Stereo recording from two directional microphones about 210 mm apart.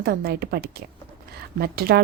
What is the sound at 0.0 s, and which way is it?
A woman's voice, 50° right (ahead or behind).